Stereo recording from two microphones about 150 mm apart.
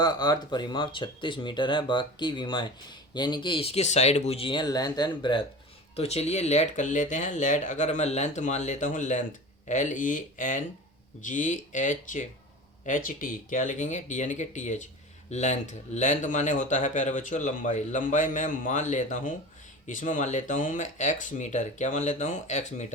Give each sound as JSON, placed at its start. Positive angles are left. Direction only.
{"t": 0.0, "sound": "speech", "side_deg": 25}
{"t": 6.0, "sound": "speech", "side_deg": 45}